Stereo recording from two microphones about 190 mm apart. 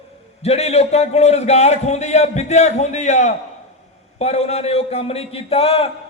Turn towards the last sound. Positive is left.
turn(degrees=30)  # may be behind; listen again after turning